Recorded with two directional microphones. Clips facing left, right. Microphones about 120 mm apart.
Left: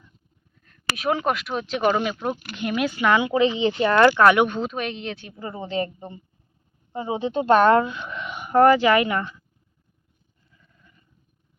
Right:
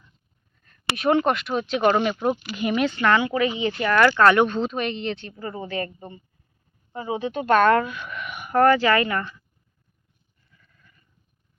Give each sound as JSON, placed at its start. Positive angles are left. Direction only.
{"t": 0.5, "sound": "a sound", "side_deg": 0}
{"t": 0.9, "sound": "speech", "side_deg": 0}
{"t": 2.1, "sound": "speech", "side_deg": -10}
{"t": 4.1, "sound": "speech", "side_deg": 10}
{"t": 5.4, "sound": "speech", "side_deg": 20}
{"t": 10.5, "sound": "goat", "side_deg": 20}